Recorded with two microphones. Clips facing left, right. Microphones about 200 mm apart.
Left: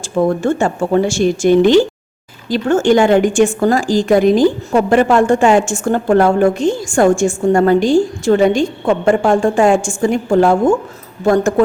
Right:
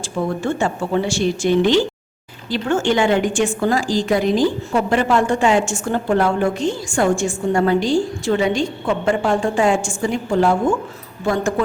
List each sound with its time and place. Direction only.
0.4 s a woman's voice: 45° left (ahead or behind)